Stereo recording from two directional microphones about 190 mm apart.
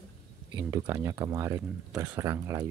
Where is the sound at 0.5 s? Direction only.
15° right (ahead or behind).